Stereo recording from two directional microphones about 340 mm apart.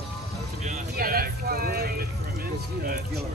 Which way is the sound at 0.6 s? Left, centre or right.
Right.